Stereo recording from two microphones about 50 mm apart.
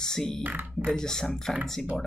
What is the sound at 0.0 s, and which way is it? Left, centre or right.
Music, centre.